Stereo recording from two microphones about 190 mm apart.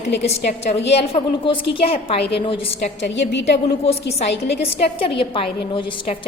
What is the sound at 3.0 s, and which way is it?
Speech, 65° left (ahead or behind).